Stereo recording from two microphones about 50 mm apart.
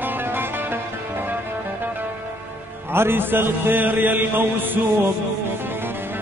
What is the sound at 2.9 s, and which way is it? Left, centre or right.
Chant, right.